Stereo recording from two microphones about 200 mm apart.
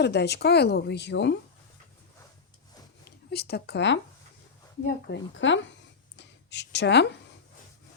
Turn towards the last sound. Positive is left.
turn(degrees=60)  # may be behind; listen again after turning